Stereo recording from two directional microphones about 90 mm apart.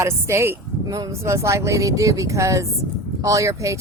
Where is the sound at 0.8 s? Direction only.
40° right (ahead or behind).